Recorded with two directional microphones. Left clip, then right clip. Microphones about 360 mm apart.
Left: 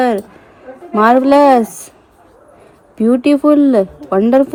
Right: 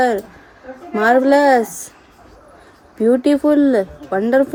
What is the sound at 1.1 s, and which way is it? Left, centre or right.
Speech, left.